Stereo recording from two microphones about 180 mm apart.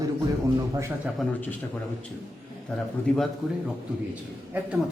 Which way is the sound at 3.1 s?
5° left (ahead or behind).